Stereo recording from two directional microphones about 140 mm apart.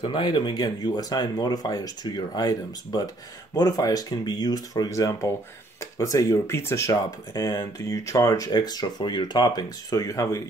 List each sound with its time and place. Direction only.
0.0 s speech: 35° left (ahead or behind)